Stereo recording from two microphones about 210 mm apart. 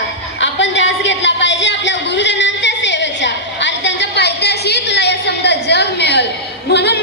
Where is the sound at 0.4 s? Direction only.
60° left (ahead or behind).